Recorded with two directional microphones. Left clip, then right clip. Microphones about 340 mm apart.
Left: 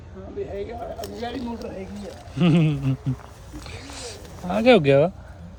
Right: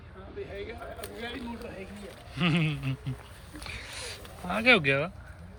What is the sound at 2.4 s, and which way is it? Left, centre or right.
Speech, centre.